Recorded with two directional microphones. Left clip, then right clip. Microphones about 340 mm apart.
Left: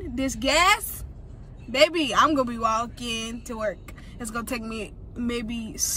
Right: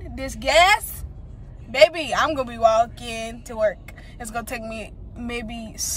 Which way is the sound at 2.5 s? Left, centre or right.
Right.